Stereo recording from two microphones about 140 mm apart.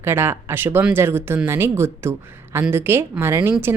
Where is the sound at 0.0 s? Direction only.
15° right (ahead or behind).